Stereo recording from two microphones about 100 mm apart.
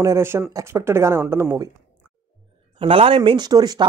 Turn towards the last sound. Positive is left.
turn(degrees=-40)  # may be behind; listen again after turning